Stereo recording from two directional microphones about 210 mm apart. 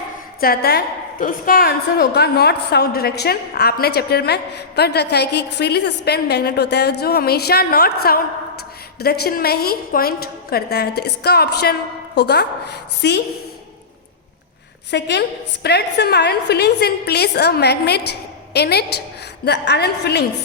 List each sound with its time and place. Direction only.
0.3 s a woman's voice: 45° left (ahead or behind)
14.8 s a woman's voice: 55° left (ahead or behind)